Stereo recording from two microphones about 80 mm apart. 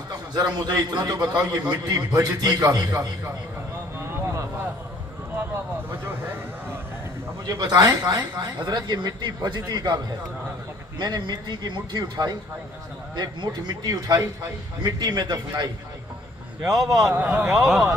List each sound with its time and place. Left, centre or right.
0.3 s a man's voice: right
4.1 s a sound: right
7.4 s speech: right
11.0 s speech: right
14.8 s speech: right
16.6 s a man's voice: right
17.2 s speech: right
17.5 s speech: centre